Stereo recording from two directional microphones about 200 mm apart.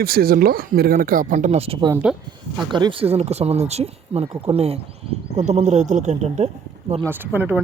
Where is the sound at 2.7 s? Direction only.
25° right (ahead or behind).